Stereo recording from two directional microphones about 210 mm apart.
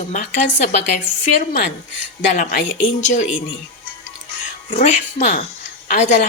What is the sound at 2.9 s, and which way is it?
Speech, 35° left (ahead or behind).